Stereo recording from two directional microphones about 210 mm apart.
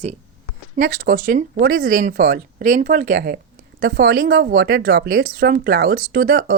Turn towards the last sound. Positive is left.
turn(degrees=-45)  # may be behind; listen again after turning